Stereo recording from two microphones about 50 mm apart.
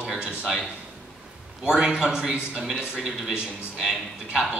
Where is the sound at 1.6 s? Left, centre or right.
Centre.